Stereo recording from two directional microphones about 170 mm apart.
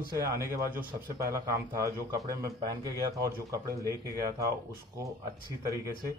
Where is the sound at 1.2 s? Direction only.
20° right (ahead or behind).